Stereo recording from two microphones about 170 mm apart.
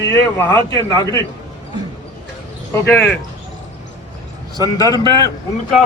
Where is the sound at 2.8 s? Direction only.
10° left (ahead or behind).